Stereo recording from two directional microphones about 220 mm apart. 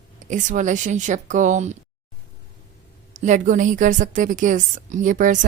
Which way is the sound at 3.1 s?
35° right (ahead or behind).